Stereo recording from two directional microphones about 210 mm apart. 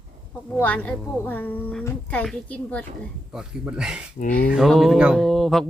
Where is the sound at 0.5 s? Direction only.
5° left (ahead or behind).